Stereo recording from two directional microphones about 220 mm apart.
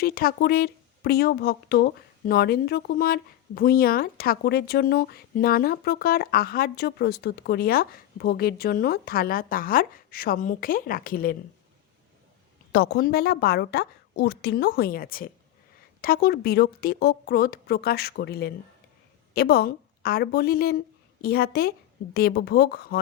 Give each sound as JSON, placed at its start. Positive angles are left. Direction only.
{"t": 0.0, "sound": "speech", "side_deg": 40}
{"t": 12.7, "sound": "a woman's voice", "side_deg": 45}